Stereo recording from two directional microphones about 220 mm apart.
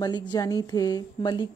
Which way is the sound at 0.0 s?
20° left (ahead or behind).